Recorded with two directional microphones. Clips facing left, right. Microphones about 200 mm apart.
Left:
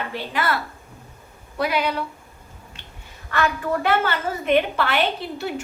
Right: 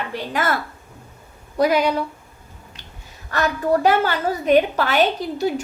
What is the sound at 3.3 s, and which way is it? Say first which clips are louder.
A woman's voice: right 3 dB; 40° right (ahead or behind).